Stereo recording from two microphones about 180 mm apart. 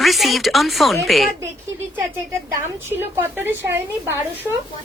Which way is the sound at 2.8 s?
10° right (ahead or behind).